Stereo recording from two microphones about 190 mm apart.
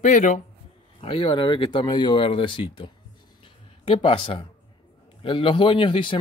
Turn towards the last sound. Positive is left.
turn(degrees=25)  # may be behind; listen again after turning